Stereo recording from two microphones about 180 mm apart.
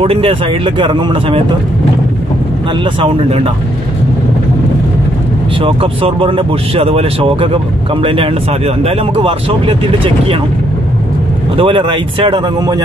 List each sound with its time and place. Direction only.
0.0 s speech: 30° right (ahead or behind)
2.8 s speech: 30° right (ahead or behind)
5.6 s speech: 30° right (ahead or behind)
11.5 s speech: 30° right (ahead or behind)